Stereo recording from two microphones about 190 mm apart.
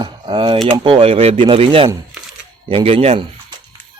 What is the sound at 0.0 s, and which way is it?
Speech, 25° right (ahead or behind).